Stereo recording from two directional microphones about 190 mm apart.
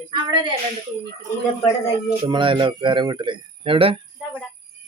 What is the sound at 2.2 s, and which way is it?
A man's voice, 25° right (ahead or behind).